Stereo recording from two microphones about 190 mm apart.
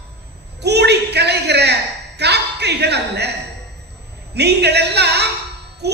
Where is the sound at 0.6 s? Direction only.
60° right (ahead or behind).